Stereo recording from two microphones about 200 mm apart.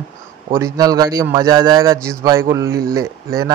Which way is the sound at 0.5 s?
15° right (ahead or behind).